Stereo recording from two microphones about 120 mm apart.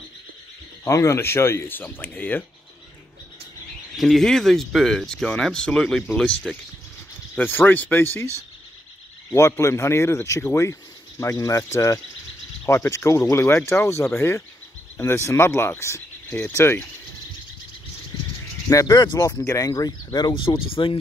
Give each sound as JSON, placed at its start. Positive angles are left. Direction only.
{"t": 0.8, "sound": "speech", "side_deg": 25}
{"t": 3.9, "sound": "speech", "side_deg": 0}
{"t": 9.3, "sound": "speech", "side_deg": 25}
{"t": 18.7, "sound": "speech", "side_deg": 30}